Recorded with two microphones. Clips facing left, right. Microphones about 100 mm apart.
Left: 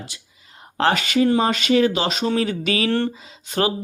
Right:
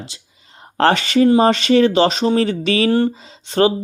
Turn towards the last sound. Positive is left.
turn(degrees=-35)  # may be behind; listen again after turning